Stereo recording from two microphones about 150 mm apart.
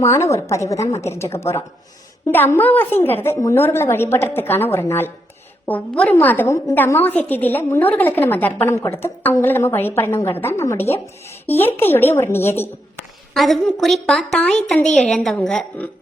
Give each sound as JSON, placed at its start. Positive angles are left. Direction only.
{"t": 0.0, "sound": "a woman's voice", "side_deg": 20}
{"t": 13.3, "sound": "a woman's voice", "side_deg": 0}